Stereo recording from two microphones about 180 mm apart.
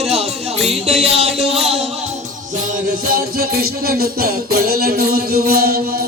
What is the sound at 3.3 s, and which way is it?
Music, 55° right (ahead or behind).